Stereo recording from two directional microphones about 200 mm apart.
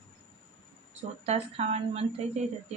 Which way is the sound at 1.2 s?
35° right (ahead or behind).